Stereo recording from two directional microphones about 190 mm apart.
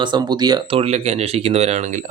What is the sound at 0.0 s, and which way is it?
Speech, 25° right (ahead or behind).